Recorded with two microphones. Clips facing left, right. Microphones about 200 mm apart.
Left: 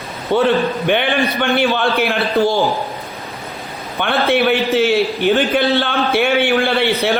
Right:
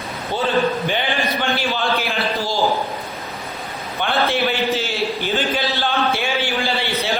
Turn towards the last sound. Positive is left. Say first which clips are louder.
# left 7 dB
turn(degrees=60)  # may be behind; listen again after turning